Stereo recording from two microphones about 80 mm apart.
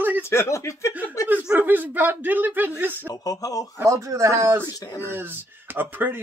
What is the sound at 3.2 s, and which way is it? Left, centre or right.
Speech, left.